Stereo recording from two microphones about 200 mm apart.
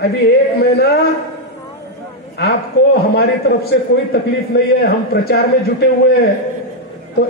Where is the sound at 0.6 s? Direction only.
50° left (ahead or behind).